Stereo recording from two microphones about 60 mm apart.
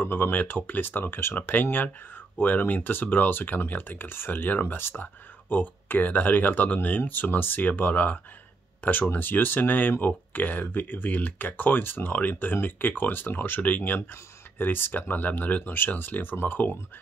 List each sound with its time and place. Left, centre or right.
0.0 s speech: left